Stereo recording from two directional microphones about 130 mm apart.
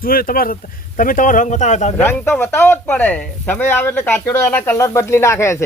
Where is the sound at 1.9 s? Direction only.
15° left (ahead or behind).